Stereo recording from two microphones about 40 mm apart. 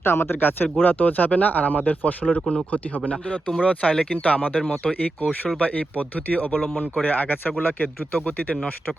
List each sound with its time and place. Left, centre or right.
0.0 s speech: left
3.6 s speech: left